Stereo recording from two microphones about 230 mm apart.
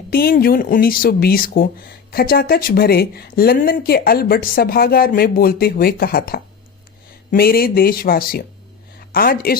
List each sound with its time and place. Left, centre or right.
0.1 s speech: left